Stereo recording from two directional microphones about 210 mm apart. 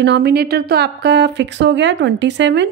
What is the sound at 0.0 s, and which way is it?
Speech, 50° right (ahead or behind).